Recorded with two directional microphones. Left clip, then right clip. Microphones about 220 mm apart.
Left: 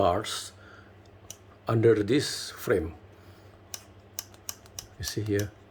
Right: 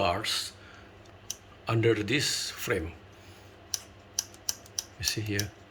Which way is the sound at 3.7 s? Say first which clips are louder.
Right 7 dB; 35° left (ahead or behind).